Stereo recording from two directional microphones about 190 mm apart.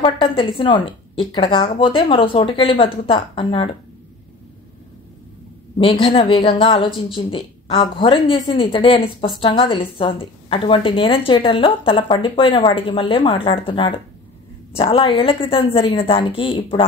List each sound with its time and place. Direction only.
0.0 s a woman's voice: 25° left (ahead or behind)
5.8 s a woman's voice: 30° left (ahead or behind)